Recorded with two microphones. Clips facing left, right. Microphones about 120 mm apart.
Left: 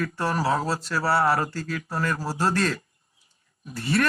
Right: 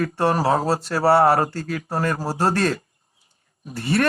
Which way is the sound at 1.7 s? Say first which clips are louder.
Right 4 dB; 40° right (ahead or behind).